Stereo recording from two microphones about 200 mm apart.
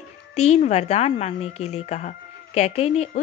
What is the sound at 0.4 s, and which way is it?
A woman's voice, 35° left (ahead or behind).